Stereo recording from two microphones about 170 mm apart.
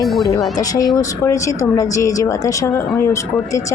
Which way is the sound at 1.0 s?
20° left (ahead or behind).